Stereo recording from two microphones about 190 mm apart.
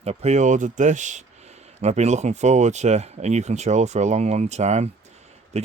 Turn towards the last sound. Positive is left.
turn(degrees=-35)  # may be behind; listen again after turning